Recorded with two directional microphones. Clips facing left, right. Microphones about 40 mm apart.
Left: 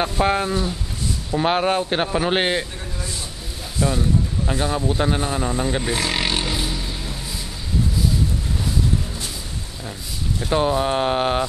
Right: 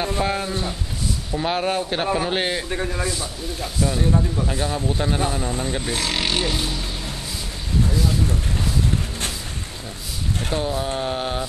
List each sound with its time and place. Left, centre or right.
0.2 s speech: left
2.7 s a man's voice: right
3.8 s speech: left; by 6.8 s centre
10.5 s speech: left